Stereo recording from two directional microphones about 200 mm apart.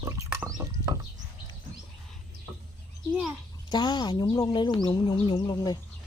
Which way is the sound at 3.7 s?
20° left (ahead or behind).